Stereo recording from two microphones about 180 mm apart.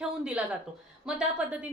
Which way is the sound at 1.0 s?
5° right (ahead or behind).